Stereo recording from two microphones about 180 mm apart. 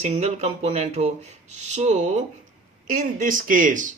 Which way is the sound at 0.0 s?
35° right (ahead or behind).